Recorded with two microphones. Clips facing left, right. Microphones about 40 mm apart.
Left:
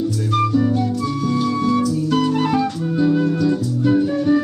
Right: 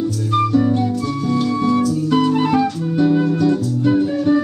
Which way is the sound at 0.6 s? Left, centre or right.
Right.